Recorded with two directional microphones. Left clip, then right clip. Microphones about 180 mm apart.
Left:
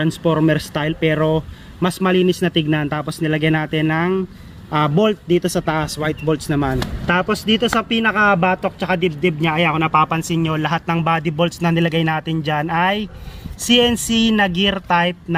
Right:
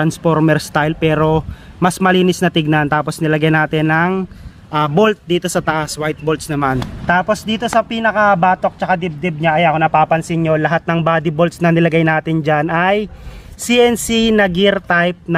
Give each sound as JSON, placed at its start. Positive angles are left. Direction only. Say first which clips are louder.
{"t": 0.0, "sound": "speech", "louder": "right 3 dB", "side_deg": -45}
{"t": 7.1, "sound": "speech", "louder": "right 3 dB", "side_deg": -35}